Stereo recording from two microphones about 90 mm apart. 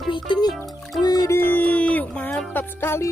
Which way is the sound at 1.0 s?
45° left (ahead or behind).